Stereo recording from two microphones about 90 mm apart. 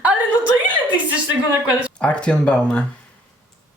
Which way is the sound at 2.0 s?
10° left (ahead or behind).